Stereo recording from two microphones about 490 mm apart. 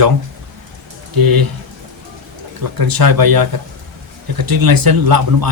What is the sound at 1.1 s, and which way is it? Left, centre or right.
Speech, right.